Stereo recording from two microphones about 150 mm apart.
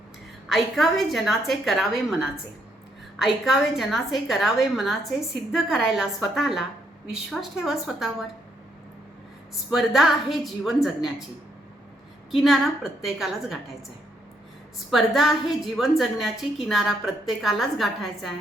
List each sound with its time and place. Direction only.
0.4 s a woman's voice: centre (ahead or behind)
9.6 s a woman's voice: 5° right (ahead or behind)
12.3 s a woman's voice: centre (ahead or behind)
14.8 s a woman's voice: centre (ahead or behind)